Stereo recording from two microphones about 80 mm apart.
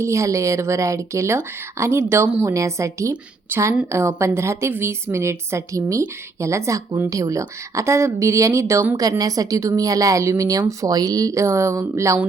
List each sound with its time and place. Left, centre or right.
0.0 s speech: right
9.0 s a woman's voice: right